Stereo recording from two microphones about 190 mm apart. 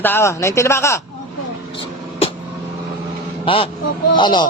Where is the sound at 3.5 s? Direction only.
30° left (ahead or behind).